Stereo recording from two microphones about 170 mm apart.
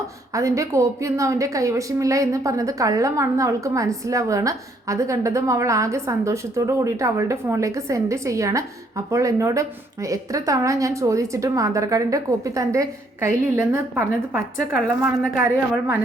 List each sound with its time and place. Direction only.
0.3 s a woman's voice: 20° right (ahead or behind)